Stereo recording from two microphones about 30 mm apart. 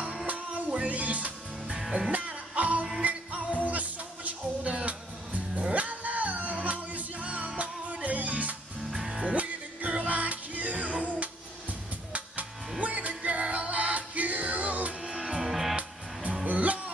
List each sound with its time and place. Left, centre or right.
0.8 s music: right
4.8 s music: right
12.8 s music: right
15.1 s music: centre
15.7 s music: right